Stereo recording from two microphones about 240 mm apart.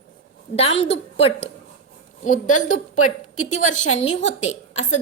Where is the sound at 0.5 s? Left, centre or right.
Left.